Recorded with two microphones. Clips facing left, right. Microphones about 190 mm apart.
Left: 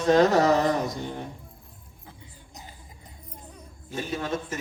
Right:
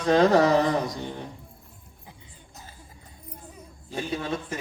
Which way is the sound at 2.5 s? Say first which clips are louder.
Left 2 dB; 15° left (ahead or behind).